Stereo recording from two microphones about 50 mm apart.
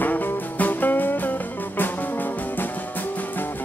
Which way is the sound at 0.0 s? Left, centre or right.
Left.